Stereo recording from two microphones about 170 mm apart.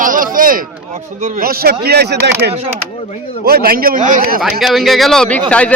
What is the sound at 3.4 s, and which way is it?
Speech, 65° right (ahead or behind).